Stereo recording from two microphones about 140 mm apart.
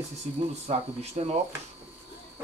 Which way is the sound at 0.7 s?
50° right (ahead or behind).